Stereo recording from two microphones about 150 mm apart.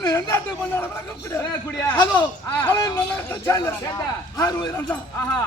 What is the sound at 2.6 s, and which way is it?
A man's voice, 15° left (ahead or behind).